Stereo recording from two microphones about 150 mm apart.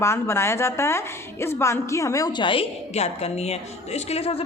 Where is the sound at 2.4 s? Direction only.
40° left (ahead or behind).